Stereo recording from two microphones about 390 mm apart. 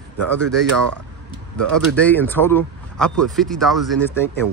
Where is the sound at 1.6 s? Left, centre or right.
Right.